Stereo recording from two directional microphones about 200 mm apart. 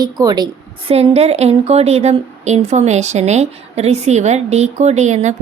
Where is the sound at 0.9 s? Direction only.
30° right (ahead or behind).